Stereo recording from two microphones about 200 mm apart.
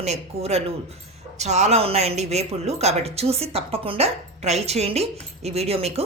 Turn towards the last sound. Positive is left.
turn(degrees=-30)  # may be behind; listen again after turning